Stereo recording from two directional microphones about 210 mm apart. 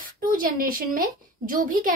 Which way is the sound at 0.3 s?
40° right (ahead or behind).